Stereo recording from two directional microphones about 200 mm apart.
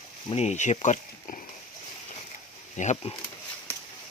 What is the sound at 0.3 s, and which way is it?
Speech, 35° left (ahead or behind).